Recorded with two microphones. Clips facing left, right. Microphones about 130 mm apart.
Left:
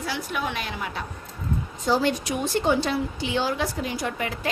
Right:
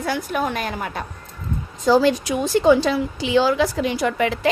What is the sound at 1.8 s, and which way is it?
A woman's voice, 90° right.